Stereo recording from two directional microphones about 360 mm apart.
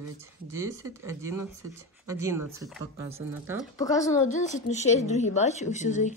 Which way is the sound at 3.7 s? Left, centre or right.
Centre.